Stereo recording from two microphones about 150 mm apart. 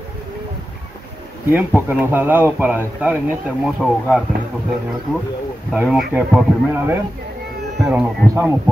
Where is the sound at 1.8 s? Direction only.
15° right (ahead or behind).